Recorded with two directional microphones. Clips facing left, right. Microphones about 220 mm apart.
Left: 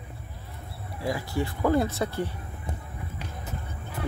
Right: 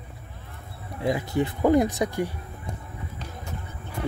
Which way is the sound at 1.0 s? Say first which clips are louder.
Right 4 dB; 20° right (ahead or behind).